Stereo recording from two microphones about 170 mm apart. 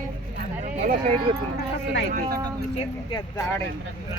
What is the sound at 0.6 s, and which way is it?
Speech, 45° right (ahead or behind).